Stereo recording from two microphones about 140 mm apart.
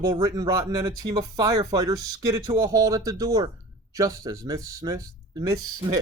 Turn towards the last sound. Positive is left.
turn(degrees=-25)  # may be behind; listen again after turning